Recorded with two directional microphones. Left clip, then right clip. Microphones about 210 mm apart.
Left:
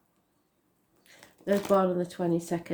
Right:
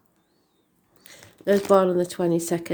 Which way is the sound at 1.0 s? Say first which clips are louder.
Right 7 dB; 55° right (ahead or behind).